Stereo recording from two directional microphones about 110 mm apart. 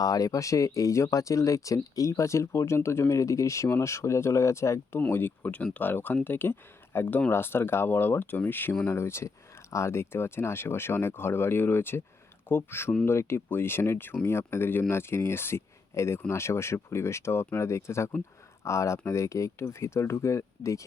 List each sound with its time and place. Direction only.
0.0 s speech: 35° left (ahead or behind)